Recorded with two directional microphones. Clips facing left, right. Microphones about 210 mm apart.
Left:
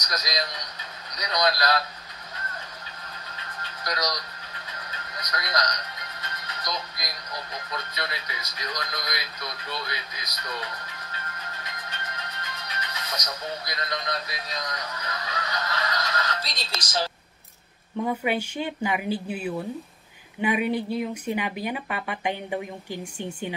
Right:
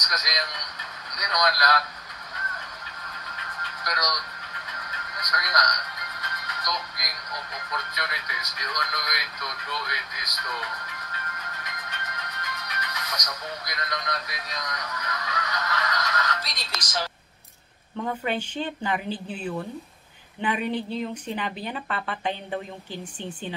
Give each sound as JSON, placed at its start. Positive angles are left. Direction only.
{"t": 0.0, "sound": "a man's voice", "side_deg": 30}
{"t": 2.3, "sound": "vehicle", "side_deg": 30}
{"t": 3.3, "sound": "music", "side_deg": 30}
{"t": 17.9, "sound": "speech", "side_deg": 10}